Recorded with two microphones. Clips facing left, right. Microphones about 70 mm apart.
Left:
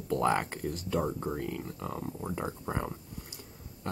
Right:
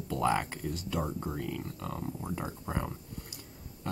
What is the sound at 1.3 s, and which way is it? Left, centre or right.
Speech, centre.